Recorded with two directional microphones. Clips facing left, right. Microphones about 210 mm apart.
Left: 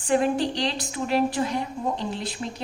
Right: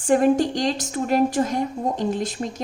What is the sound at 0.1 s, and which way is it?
A woman's voice, 45° right (ahead or behind).